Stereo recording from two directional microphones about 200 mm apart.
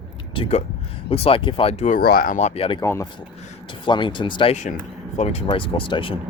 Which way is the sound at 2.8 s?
15° left (ahead or behind).